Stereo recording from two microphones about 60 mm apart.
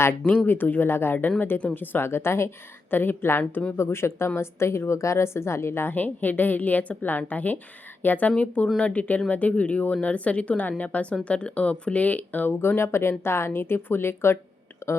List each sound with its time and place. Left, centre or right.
0.4 s speech: left
2.9 s a woman's voice: left
5.9 s speech: left
14.8 s a sound: left